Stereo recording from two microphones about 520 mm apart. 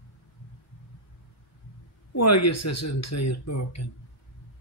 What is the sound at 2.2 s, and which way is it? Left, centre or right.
Speech, left.